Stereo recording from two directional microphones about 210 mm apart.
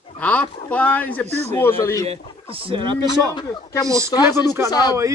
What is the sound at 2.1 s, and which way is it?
Speech, 25° right (ahead or behind).